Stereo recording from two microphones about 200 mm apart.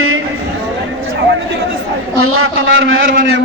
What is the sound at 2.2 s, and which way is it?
A man's voice, 85° right.